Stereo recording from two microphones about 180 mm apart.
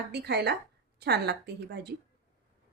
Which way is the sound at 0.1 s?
70° right (ahead or behind).